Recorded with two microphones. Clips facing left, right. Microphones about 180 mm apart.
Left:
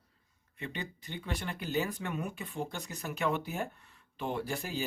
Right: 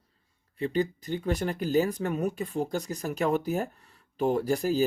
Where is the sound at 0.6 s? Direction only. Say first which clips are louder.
Right 13 dB; 40° right (ahead or behind).